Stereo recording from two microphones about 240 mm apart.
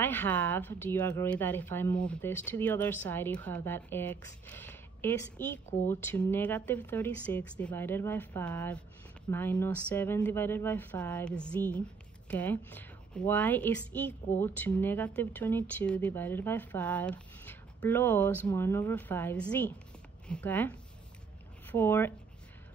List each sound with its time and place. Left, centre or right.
0.0 s speech: centre